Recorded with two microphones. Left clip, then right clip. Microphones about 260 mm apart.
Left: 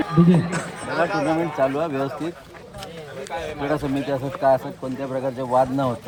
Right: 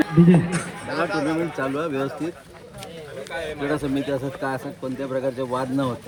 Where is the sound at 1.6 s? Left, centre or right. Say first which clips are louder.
Left 4 dB; left.